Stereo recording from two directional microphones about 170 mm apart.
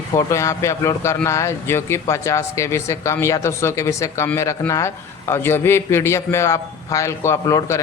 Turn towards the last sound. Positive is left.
turn(degrees=20)  # may be behind; listen again after turning